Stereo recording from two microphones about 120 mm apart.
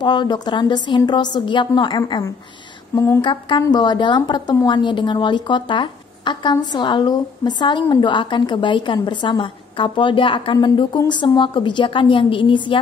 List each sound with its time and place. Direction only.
0.0 s speech: 40° left (ahead or behind)
2.9 s speech: 25° left (ahead or behind)
3.2 s a woman's voice: 40° left (ahead or behind)